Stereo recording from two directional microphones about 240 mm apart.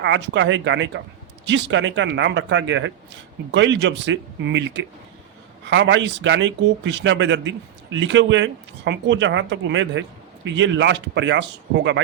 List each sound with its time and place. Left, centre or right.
0.0 s speech: right